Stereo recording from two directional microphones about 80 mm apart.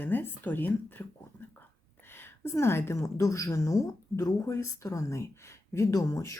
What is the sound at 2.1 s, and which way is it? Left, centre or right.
Speech, left.